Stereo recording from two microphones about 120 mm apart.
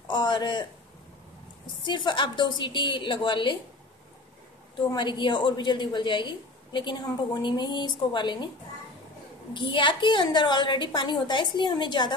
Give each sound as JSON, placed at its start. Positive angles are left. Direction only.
{"t": 0.1, "sound": "a woman's voice", "side_deg": 40}
{"t": 1.9, "sound": "a woman's voice", "side_deg": 40}
{"t": 4.9, "sound": "a woman's voice", "side_deg": 40}
{"t": 9.5, "sound": "a woman's voice", "side_deg": 40}